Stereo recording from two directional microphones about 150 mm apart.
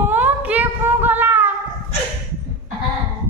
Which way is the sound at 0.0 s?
10° right (ahead or behind).